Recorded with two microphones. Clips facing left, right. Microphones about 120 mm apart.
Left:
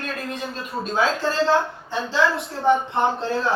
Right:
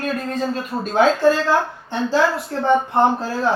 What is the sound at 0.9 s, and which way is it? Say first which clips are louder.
Speech: right 7 dB; 50° right (ahead or behind).